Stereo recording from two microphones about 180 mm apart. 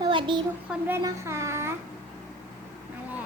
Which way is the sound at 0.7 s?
10° right (ahead or behind).